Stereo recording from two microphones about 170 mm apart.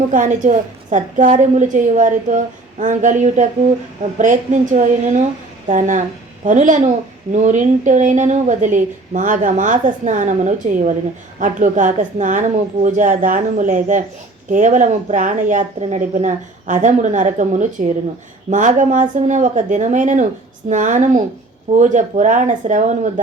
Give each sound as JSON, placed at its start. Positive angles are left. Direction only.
{"t": 0.1, "sound": "a woman's voice", "side_deg": -50}